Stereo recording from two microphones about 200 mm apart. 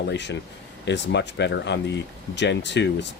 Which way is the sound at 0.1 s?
60° left (ahead or behind).